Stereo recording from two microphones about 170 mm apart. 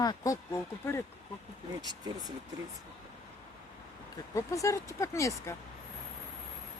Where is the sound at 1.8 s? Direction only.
25° right (ahead or behind).